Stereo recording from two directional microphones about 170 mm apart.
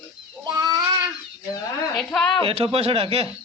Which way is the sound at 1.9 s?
Centre (ahead or behind).